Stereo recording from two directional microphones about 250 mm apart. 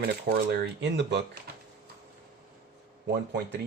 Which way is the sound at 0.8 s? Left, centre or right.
Right.